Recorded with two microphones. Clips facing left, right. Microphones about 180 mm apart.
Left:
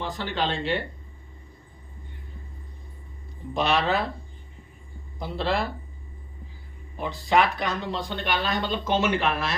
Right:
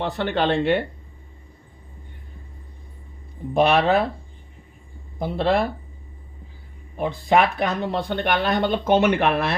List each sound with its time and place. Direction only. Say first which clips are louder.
0.0 s speech: right 6 dB; 60° right (ahead or behind)
3.5 s speech: right 6 dB; 55° right (ahead or behind)
5.2 s speech: right 6 dB; 55° right (ahead or behind)
6.9 s speech: right 4 dB; 55° right (ahead or behind)